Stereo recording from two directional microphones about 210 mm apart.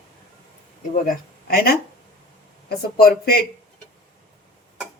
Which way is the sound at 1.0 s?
45° left (ahead or behind).